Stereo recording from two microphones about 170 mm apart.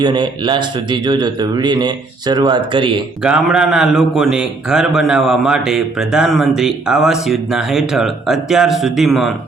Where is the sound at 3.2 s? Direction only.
5° right (ahead or behind).